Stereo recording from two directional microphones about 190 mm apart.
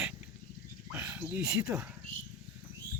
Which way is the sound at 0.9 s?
15° right (ahead or behind).